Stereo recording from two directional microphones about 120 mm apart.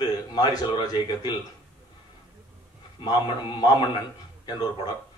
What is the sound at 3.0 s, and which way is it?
A man's voice, 35° left (ahead or behind).